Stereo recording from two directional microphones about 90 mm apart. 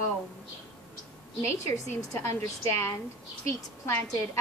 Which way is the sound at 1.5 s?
35° left (ahead or behind).